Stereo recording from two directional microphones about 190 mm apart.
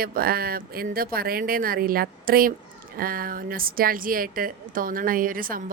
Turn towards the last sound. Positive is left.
turn(degrees=-50)  # may be behind; listen again after turning